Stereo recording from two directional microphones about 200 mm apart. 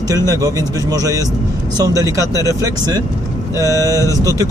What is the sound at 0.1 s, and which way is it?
Speech, 20° right (ahead or behind).